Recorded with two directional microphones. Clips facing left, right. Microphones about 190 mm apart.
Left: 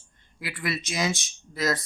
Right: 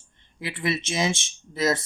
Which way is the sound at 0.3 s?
25° right (ahead or behind).